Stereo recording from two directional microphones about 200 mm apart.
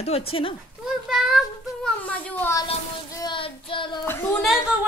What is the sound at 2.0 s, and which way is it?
Speech, 10° left (ahead or behind).